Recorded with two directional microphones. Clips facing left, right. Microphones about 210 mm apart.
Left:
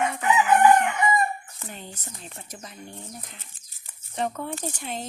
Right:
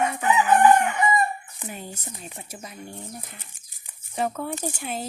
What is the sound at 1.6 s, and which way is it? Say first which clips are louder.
Speech: right 3 dB; 10° right (ahead or behind).